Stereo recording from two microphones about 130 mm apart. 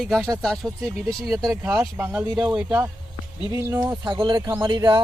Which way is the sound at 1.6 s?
20° right (ahead or behind).